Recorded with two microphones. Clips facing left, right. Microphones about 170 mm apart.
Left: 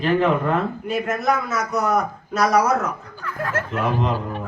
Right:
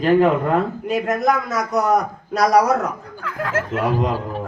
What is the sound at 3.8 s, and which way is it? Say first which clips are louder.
Speech: right 1 dB; 40° right (ahead or behind).